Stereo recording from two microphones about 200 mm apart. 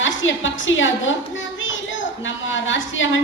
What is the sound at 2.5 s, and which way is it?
Speech, 70° left (ahead or behind).